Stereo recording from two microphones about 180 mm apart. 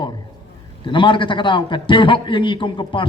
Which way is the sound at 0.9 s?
25° left (ahead or behind).